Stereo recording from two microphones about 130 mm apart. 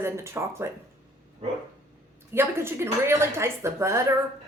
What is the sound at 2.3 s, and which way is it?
Speech, 20° right (ahead or behind).